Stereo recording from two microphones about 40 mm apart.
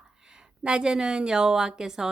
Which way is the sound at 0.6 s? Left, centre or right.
Right.